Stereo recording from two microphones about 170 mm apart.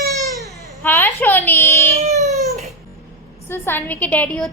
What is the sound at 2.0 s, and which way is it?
Cat, 40° right (ahead or behind).